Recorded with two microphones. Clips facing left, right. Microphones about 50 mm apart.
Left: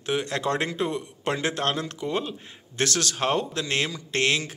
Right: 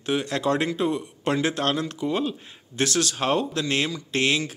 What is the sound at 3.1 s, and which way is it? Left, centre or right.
A man's voice, left.